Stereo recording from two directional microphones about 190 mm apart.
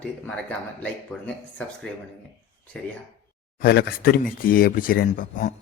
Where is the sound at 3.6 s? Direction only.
55° left (ahead or behind).